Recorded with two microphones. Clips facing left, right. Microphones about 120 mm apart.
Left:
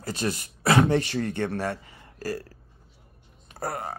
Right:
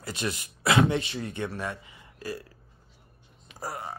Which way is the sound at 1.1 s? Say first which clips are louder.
Left 6 dB; 65° left (ahead or behind).